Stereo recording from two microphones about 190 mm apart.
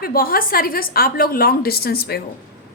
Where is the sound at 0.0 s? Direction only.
50° left (ahead or behind).